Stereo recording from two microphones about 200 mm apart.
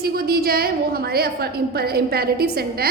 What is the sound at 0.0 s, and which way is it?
A woman's voice, 50° right (ahead or behind).